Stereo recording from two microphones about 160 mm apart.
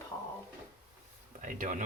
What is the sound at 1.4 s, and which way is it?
Speech, 50° right (ahead or behind).